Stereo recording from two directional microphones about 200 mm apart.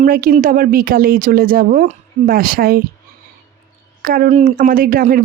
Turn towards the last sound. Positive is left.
turn(degrees=-45)  # may be behind; listen again after turning